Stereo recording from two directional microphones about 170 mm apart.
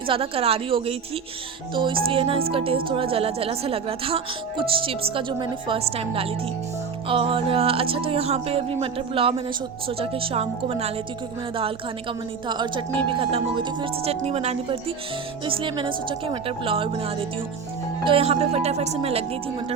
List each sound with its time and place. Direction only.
0.1 s a woman's voice: 35° right (ahead or behind)
12.5 s a woman's voice: 25° right (ahead or behind)